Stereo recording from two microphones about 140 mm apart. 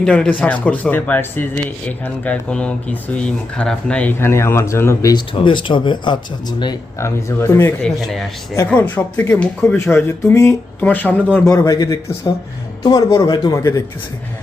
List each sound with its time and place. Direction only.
0.0 s speech: 10° left (ahead or behind)
5.1 s speech: 35° left (ahead or behind)
7.0 s a man's voice: 20° left (ahead or behind)
7.8 s speech: 5° left (ahead or behind)
11.4 s a man's voice: 25° left (ahead or behind)